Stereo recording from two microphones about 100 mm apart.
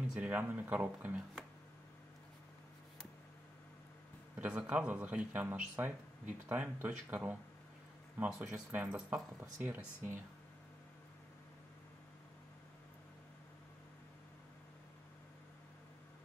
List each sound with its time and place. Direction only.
0.2 s a man's voice: 15° right (ahead or behind)
4.4 s a man's voice: 15° right (ahead or behind)
8.2 s a man's voice: 10° right (ahead or behind)